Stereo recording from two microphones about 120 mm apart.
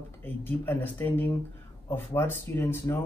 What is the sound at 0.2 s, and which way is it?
Speech, 15° left (ahead or behind).